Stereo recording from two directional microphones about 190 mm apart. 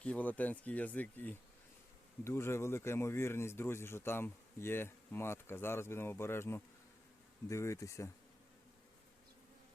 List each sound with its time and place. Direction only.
0.0 s speech: 5° left (ahead or behind)